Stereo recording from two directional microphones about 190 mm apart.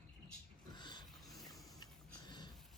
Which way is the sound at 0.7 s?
25° left (ahead or behind).